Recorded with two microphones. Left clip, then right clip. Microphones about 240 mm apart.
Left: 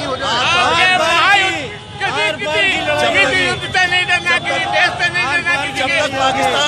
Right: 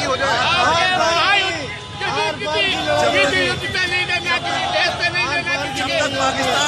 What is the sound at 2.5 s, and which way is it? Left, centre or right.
A man's voice, centre.